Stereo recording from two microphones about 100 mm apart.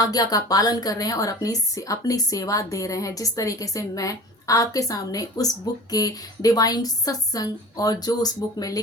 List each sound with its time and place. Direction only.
0.0 s a woman's voice: 40° left (ahead or behind)